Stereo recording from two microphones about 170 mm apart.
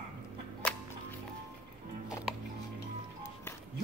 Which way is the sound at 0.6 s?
5° left (ahead or behind).